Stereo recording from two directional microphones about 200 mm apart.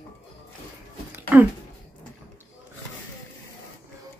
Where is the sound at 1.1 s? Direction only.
10° right (ahead or behind).